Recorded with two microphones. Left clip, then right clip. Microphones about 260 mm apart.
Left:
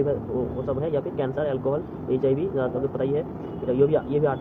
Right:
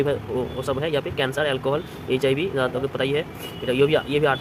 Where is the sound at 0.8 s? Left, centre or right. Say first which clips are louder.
Right 3 dB; right.